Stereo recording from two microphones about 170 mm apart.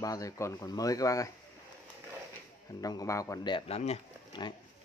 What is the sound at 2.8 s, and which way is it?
Speech, 20° left (ahead or behind).